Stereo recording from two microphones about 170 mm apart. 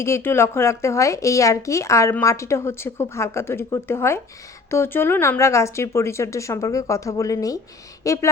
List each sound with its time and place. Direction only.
0.0 s speech: 15° left (ahead or behind)